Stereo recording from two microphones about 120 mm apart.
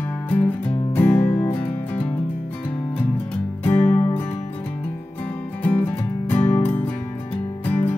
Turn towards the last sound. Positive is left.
turn(degrees=15)  # may be behind; listen again after turning